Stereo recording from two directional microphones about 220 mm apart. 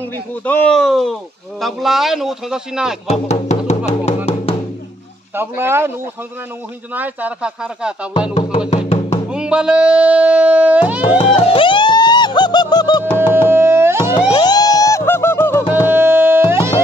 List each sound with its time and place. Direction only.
0.5 s speech: 5° left (ahead or behind)
3.1 s speech: 30° left (ahead or behind)
5.3 s speech: 10° right (ahead or behind)
8.4 s speech: 25° left (ahead or behind)
9.3 s speech: 5° right (ahead or behind)
11.1 s music: 25° left (ahead or behind)
13.3 s music: 10° right (ahead or behind)
14.3 s music: 20° left (ahead or behind)
15.9 s music: 10° right (ahead or behind)